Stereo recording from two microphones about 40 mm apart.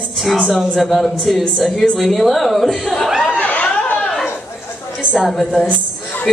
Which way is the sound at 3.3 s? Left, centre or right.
Left.